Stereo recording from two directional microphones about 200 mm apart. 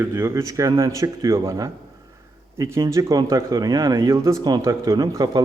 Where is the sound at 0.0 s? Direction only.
10° right (ahead or behind).